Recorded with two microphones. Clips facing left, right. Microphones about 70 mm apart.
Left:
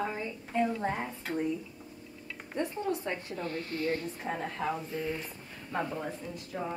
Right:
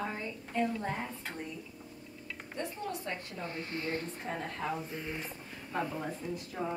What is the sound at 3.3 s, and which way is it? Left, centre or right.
Speech, right.